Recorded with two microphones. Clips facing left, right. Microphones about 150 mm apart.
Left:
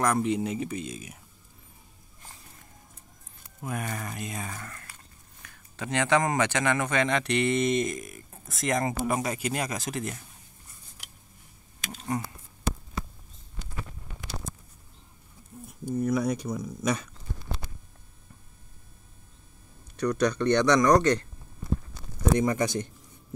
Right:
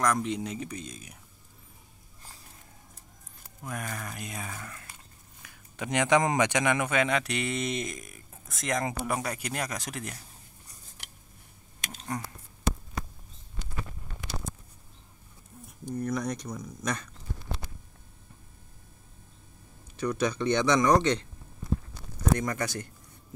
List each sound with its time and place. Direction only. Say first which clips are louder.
0.0 s speech: left 3 dB; 5° left (ahead or behind)
3.6 s speech: left 3 dB; 5° left (ahead or behind)
12.1 s speech: left 4 dB; 5° left (ahead or behind)
15.8 s speech: left 5 dB; 5° left (ahead or behind)
20.0 s speech: left 3 dB; 5° right (ahead or behind)
22.3 s speech: left 4 dB; 20° left (ahead or behind)